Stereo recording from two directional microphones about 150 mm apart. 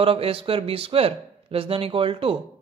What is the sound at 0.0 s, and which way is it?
Speech, 40° right (ahead or behind).